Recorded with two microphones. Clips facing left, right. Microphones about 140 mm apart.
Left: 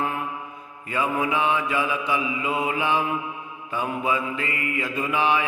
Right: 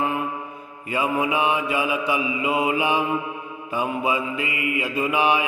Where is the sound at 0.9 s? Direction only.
10° right (ahead or behind).